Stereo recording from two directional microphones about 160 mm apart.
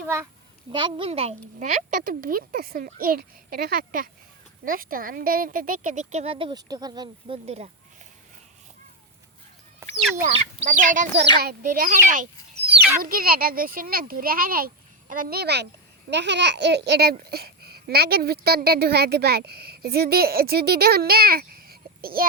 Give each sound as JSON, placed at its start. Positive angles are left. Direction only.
{"t": 0.7, "sound": "a child's voice", "side_deg": -30}
{"t": 7.4, "sound": "speech", "side_deg": -40}
{"t": 9.8, "sound": "chicken", "side_deg": -15}
{"t": 10.2, "sound": "speech", "side_deg": -45}
{"t": 11.3, "sound": "a child's voice", "side_deg": -70}
{"t": 13.0, "sound": "a child's voice", "side_deg": -65}